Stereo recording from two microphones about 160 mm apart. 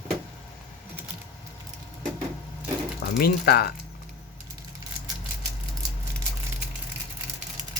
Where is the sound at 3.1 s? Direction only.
70° left (ahead or behind).